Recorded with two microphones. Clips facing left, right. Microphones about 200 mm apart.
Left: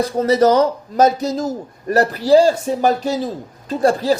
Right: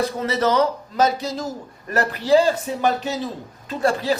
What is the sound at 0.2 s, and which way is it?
A man's voice, 40° left (ahead or behind).